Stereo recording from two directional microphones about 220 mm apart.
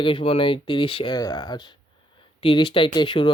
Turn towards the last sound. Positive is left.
turn(degrees=25)  # may be behind; listen again after turning